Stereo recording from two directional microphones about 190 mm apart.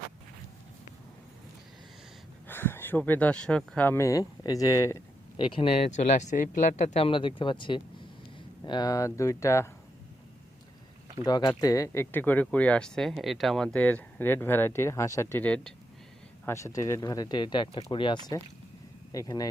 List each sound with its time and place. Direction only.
2.5 s speech: 10° left (ahead or behind)
5.5 s speech: 30° left (ahead or behind)
11.2 s speech: 20° left (ahead or behind)